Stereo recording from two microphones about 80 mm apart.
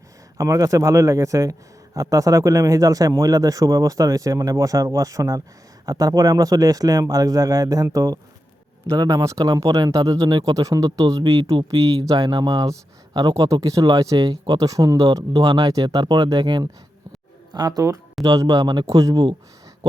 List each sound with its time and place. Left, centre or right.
0.3 s speech: right
17.5 s speech: right
18.9 s speech: right